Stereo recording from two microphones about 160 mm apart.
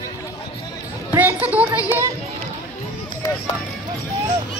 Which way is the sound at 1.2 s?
10° right (ahead or behind).